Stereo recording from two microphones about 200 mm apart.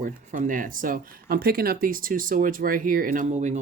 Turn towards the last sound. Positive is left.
turn(degrees=-40)  # may be behind; listen again after turning